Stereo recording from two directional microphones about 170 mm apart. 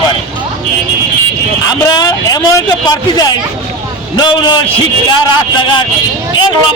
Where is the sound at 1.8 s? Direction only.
25° left (ahead or behind).